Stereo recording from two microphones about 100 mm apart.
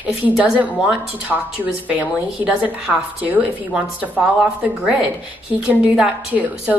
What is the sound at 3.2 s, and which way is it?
A woman's voice, 15° right (ahead or behind).